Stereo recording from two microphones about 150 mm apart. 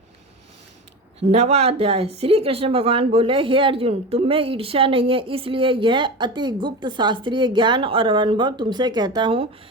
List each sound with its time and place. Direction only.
1.3 s speech: 45° right (ahead or behind)